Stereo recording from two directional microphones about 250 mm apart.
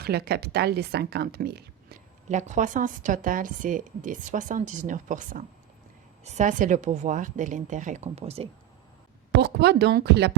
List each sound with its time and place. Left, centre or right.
0.0 s a woman's voice: right
2.3 s a woman's voice: right
9.4 s a woman's voice: right